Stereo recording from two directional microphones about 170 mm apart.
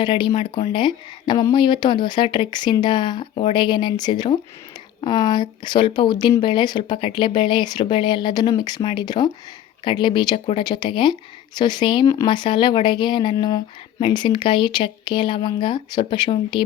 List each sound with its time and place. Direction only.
0.0 s speech: 30° left (ahead or behind)